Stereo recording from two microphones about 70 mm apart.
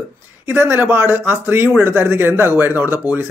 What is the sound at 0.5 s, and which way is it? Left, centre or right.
Speech, right.